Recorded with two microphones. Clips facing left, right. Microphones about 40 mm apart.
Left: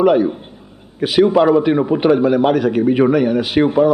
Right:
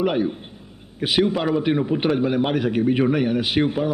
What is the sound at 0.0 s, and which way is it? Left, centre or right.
A man's voice, centre.